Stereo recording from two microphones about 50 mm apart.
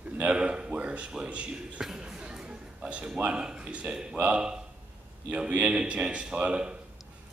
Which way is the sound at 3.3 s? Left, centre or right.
Right.